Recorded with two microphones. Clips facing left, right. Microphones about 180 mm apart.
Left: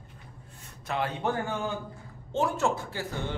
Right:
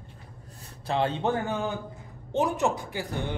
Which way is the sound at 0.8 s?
30° right (ahead or behind).